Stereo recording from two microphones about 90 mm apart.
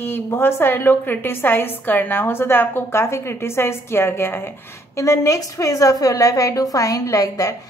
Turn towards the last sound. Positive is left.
turn(degrees=40)  # may be behind; listen again after turning